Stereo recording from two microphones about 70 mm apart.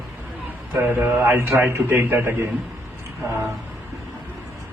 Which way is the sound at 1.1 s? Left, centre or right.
Right.